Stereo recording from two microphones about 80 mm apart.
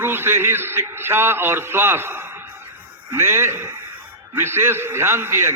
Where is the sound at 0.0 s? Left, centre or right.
Right.